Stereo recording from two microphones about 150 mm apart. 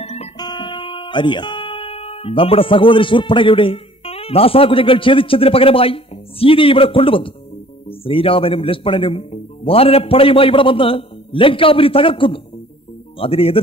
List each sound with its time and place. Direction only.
0.0 s music: 45° left (ahead or behind)
0.4 s a man's voice: 30° left (ahead or behind)